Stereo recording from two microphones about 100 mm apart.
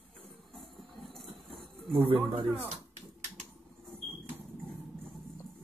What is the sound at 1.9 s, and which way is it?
Speech, 65° right (ahead or behind).